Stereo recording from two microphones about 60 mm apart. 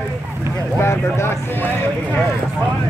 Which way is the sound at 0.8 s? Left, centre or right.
Left.